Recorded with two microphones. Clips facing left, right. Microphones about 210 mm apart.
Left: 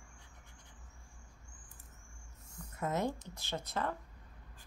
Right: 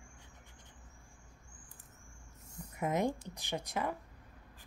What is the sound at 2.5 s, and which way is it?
Speech, 15° right (ahead or behind).